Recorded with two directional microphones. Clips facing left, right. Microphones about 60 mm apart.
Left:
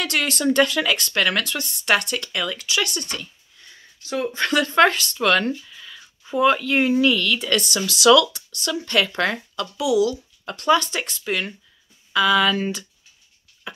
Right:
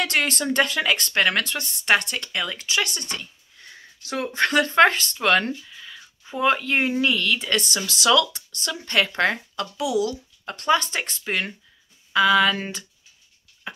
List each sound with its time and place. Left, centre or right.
0.0 s speech: right
3.6 s a sound: right
4.4 s speech: right
13.7 s tick-tock: right